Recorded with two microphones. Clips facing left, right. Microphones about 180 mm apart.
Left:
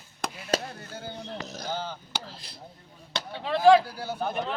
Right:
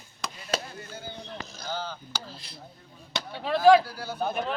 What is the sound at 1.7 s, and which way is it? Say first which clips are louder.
Speech: even; 15° left (ahead or behind).